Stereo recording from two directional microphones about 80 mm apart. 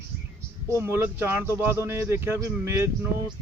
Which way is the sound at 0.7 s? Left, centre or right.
Right.